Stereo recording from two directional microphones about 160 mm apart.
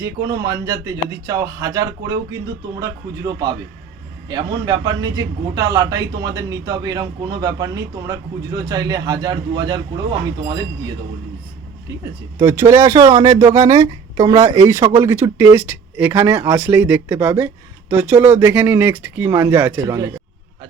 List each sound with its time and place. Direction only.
0.0 s a man's voice: 20° right (ahead or behind)
12.4 s a man's voice: 20° right (ahead or behind)